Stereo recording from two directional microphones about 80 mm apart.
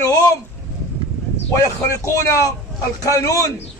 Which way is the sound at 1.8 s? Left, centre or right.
Left.